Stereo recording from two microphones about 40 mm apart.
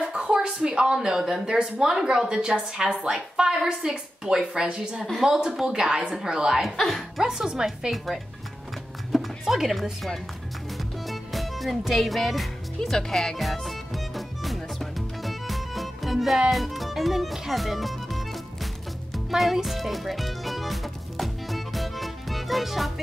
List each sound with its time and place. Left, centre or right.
0.0 s a woman's voice: right
6.6 s speech: centre
7.2 s speech: centre
9.1 s music: centre
9.5 s speech: centre
11.1 s music: centre
12.9 s speech: centre
13.4 s music: centre